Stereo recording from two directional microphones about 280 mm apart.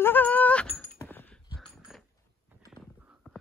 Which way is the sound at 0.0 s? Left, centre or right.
Centre.